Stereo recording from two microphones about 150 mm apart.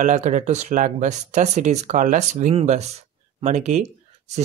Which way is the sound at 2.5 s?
45° right (ahead or behind).